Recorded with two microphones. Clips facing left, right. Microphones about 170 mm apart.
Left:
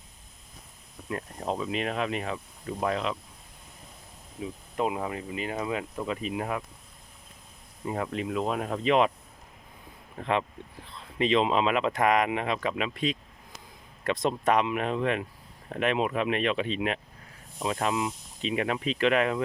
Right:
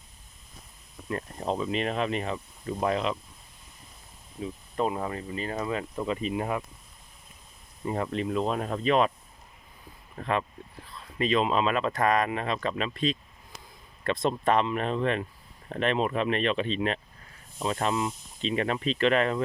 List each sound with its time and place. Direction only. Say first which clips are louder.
1.0 s speech: right 1 dB; 5° left (ahead or behind)
4.4 s speech: right 1 dB; 10° left (ahead or behind)
7.9 s speech: right 2 dB; 5° left (ahead or behind)
11.2 s speech: left 1 dB; 20° left (ahead or behind)